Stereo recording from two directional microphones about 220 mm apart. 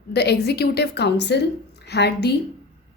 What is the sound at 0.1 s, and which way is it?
Speech, 50° left (ahead or behind).